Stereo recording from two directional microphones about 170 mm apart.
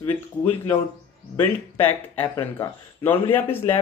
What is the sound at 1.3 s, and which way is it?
Speech, 15° left (ahead or behind).